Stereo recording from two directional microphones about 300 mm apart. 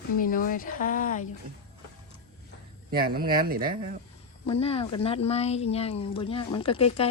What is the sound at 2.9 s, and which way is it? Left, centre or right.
Speech, right.